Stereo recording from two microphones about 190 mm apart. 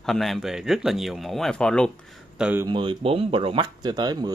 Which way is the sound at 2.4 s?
10° right (ahead or behind).